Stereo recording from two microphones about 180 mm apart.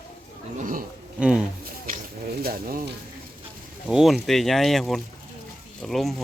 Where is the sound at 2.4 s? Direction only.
55° right (ahead or behind).